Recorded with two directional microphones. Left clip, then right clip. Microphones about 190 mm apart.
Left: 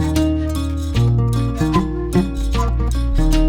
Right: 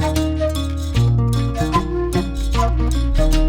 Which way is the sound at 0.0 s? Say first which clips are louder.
Even; centre (ahead or behind).